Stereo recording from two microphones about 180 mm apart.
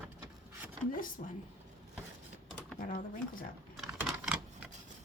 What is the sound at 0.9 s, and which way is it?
Speech, 50° left (ahead or behind).